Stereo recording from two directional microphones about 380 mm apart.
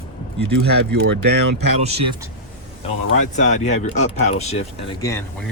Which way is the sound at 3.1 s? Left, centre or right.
Centre.